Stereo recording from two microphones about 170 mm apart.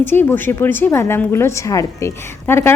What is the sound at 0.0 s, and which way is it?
A woman's voice, 10° left (ahead or behind).